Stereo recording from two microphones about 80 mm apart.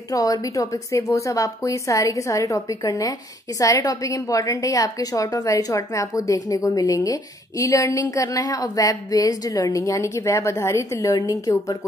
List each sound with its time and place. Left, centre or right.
0.1 s a woman's voice: left